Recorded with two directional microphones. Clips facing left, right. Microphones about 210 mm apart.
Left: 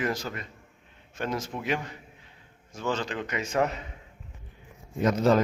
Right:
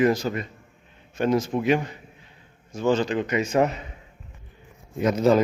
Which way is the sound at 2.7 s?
10° right (ahead or behind).